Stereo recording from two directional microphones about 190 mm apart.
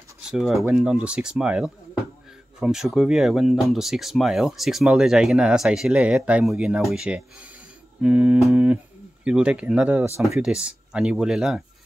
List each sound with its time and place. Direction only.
0.2 s speech: 5° right (ahead or behind)
8.0 s humming: 5° right (ahead or behind)
9.2 s speech: 5° right (ahead or behind)